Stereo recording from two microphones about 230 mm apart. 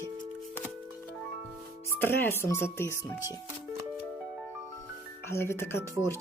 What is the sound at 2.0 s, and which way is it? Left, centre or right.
Speech, centre.